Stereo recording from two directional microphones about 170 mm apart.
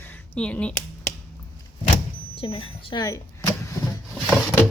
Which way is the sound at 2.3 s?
30° left (ahead or behind).